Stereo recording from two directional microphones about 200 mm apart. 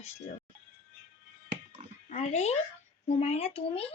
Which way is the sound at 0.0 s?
35° left (ahead or behind).